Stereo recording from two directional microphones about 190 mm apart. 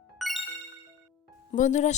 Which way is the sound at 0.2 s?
Centre (ahead or behind).